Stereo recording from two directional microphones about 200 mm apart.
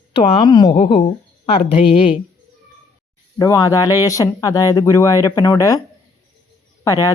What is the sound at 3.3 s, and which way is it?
A woman's voice, 15° left (ahead or behind).